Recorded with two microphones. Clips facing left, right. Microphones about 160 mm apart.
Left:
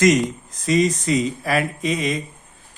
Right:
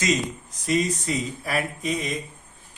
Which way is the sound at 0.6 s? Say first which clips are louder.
Left 5 dB; 90° left.